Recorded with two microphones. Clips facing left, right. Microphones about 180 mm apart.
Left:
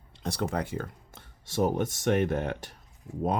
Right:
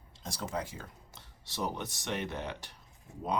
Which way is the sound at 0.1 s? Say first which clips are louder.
Left 7 dB; 65° left (ahead or behind).